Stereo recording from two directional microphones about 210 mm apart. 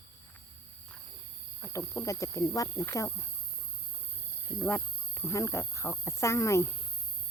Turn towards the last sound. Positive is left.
turn(degrees=15)  # may be behind; listen again after turning